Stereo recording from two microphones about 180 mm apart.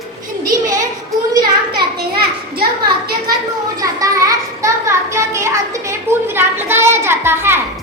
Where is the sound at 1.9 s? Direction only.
60° right (ahead or behind).